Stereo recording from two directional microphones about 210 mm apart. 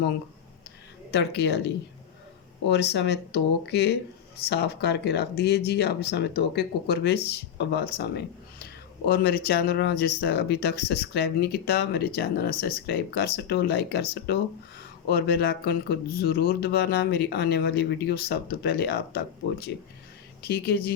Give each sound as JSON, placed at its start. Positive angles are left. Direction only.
{"t": 1.1, "sound": "speech", "side_deg": 55}